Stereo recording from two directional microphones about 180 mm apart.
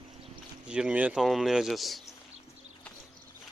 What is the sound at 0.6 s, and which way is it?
Speech, 5° right (ahead or behind).